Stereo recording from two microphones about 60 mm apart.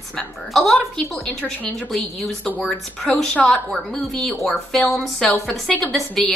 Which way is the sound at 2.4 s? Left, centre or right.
Centre.